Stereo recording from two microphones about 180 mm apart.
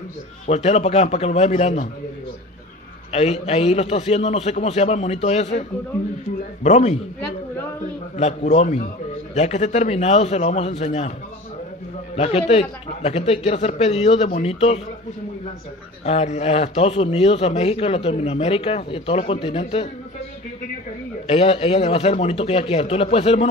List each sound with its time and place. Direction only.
0.5 s a man's voice: 35° left (ahead or behind)
3.1 s a man's voice: 35° left (ahead or behind)
8.2 s a man's voice: 35° left (ahead or behind)
12.2 s a man's voice: 35° left (ahead or behind)
16.1 s a man's voice: 40° left (ahead or behind)
21.3 s a man's voice: 30° left (ahead or behind)